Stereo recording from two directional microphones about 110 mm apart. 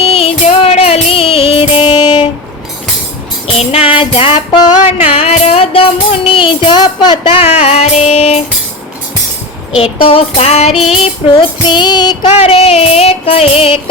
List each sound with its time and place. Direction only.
0.0 s music: 65° left (ahead or behind)
3.4 s music: 70° left (ahead or behind); by 7.5 s 50° left (ahead or behind)
7.6 s child singing: 70° left (ahead or behind)
9.7 s child singing: 60° left (ahead or behind)
10.7 s music: 5° right (ahead or behind)
11.0 s music: 50° left (ahead or behind)
12.4 s music: 60° left (ahead or behind)